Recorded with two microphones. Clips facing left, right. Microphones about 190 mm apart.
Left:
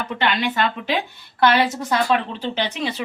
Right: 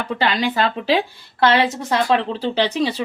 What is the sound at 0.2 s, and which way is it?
A woman's voice, 35° right (ahead or behind).